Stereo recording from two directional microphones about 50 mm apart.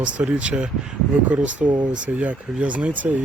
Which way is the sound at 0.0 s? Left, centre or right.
Right.